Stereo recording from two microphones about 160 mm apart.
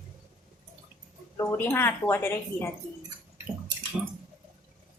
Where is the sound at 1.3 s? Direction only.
15° left (ahead or behind).